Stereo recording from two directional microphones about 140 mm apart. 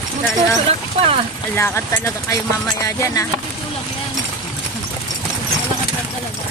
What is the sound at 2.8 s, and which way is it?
Speech, 25° left (ahead or behind).